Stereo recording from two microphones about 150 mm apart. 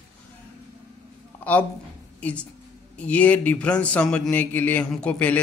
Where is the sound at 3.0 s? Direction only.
10° left (ahead or behind).